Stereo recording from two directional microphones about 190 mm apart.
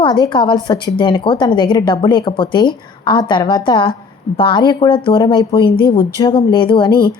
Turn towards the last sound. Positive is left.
turn(degrees=25)  # may be behind; listen again after turning